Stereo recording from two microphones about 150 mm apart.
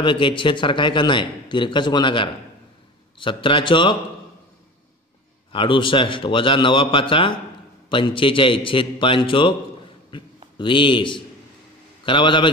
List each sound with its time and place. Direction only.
0.0 s a man's voice: 35° left (ahead or behind)
5.5 s a man's voice: 35° left (ahead or behind)